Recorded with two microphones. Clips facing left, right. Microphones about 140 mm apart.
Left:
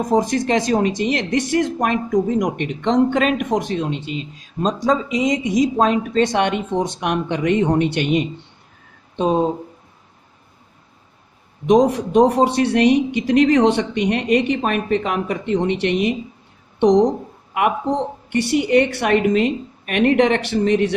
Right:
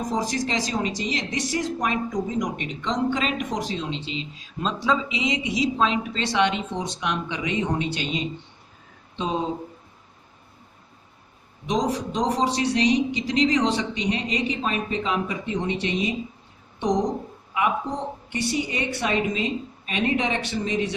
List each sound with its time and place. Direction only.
0.0 s speech: 55° left (ahead or behind)
11.6 s speech: 55° left (ahead or behind)
17.5 s speech: 60° left (ahead or behind)